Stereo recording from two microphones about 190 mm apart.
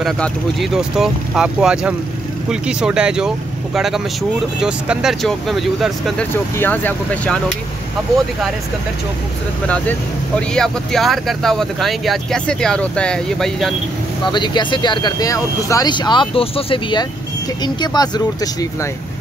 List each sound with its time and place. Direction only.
0.0 s speech: centre (ahead or behind)
6.3 s speech: 10° left (ahead or behind)
10.5 s speech: 5° left (ahead or behind)
14.2 s speech: 25° left (ahead or behind)